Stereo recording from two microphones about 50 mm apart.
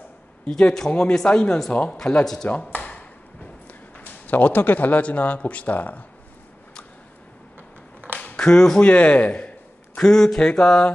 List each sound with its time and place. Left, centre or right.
0.5 s speech: centre
2.2 s speech: centre
2.7 s a sound: left
4.0 s speech: left
8.4 s a man's voice: centre
10.0 s speech: centre